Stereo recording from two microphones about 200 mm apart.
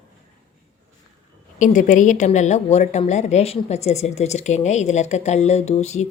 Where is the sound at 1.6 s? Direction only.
40° left (ahead or behind).